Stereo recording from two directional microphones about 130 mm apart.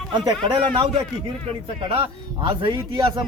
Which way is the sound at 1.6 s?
45° right (ahead or behind).